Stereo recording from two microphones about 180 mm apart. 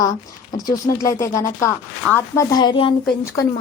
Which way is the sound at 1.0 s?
15° left (ahead or behind).